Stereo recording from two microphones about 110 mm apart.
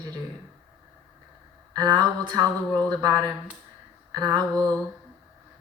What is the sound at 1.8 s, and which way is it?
Speech, 40° right (ahead or behind).